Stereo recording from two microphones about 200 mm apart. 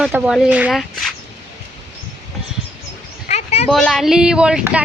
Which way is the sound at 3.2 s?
30° left (ahead or behind).